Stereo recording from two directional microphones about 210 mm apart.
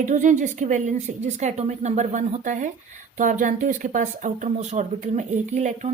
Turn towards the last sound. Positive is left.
turn(degrees=-35)  # may be behind; listen again after turning